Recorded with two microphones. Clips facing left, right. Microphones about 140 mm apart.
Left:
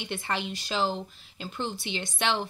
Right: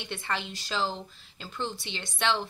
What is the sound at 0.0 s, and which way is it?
Speech, 5° left (ahead or behind).